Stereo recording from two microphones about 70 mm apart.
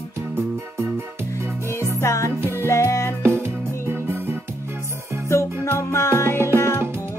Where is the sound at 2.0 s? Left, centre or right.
Left.